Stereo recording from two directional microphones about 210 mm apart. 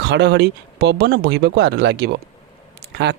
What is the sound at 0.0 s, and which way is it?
Speech, 55° right (ahead or behind).